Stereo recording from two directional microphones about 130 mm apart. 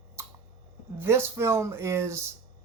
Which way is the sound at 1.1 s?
20° right (ahead or behind).